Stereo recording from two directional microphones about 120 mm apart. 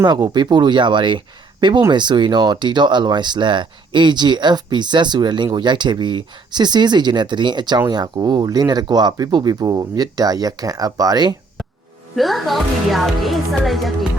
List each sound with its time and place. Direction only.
0.0 s speech: 35° right (ahead or behind)
12.1 s speech: centre (ahead or behind)